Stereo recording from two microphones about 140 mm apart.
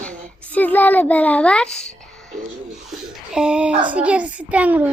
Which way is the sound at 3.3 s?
5° right (ahead or behind).